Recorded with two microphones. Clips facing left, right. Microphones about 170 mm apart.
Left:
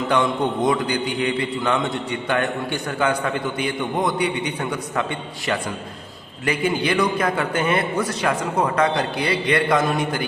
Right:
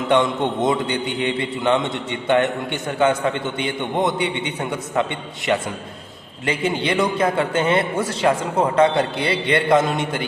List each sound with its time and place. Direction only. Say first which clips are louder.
0.1 s a man's voice: right 3 dB; 25° right (ahead or behind)
6.4 s a man's voice: even; 25° right (ahead or behind)